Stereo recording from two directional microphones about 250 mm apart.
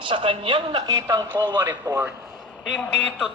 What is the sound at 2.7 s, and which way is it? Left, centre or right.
Speech, centre.